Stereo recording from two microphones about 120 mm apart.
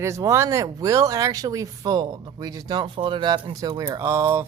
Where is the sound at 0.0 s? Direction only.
25° right (ahead or behind).